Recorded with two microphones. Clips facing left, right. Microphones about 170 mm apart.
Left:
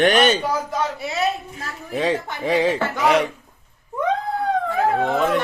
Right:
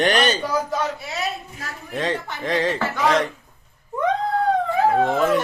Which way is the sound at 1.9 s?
10° left (ahead or behind).